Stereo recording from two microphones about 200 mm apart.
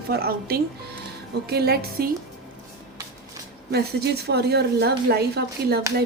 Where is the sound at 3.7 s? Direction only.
55° right (ahead or behind).